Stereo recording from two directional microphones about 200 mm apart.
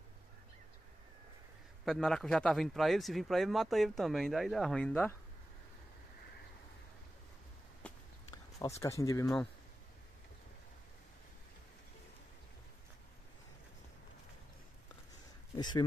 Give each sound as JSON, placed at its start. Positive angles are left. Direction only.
{"t": 1.9, "sound": "speech", "side_deg": 0}
{"t": 7.8, "sound": "walk", "side_deg": 5}
{"t": 8.3, "sound": "speech", "side_deg": 15}
{"t": 15.5, "sound": "a sound", "side_deg": 20}